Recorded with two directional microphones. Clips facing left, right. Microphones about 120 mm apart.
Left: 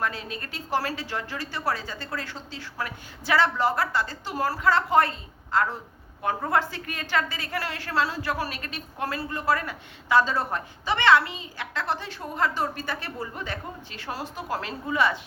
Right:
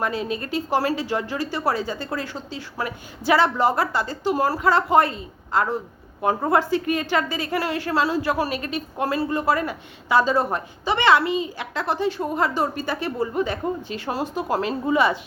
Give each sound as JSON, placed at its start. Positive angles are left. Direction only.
{"t": 0.0, "sound": "a woman's voice", "side_deg": -15}